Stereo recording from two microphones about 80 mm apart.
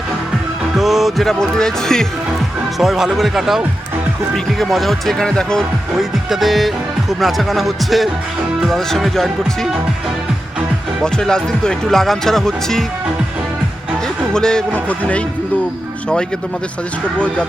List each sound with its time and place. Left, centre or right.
0.8 s speech: centre
2.7 s speech: centre
6.0 s speech: centre
11.0 s speech: centre
14.3 s speech: centre
17.2 s speech: centre